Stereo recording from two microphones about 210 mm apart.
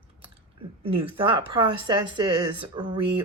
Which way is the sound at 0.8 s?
25° right (ahead or behind).